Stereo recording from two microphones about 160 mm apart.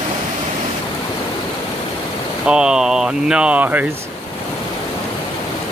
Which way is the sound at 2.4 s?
5° right (ahead or behind).